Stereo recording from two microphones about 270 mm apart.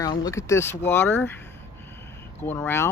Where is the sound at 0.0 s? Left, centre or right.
Centre.